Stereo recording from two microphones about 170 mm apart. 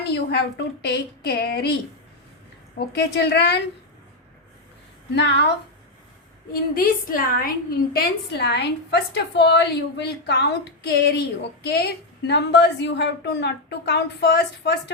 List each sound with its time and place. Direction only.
0.0 s a woman's voice: 75° left (ahead or behind)
5.1 s a woman's voice: 80° left
6.5 s a woman's voice: 55° left (ahead or behind)
7.9 s a woman's voice: 75° left (ahead or behind)
12.3 s a woman's voice: 85° left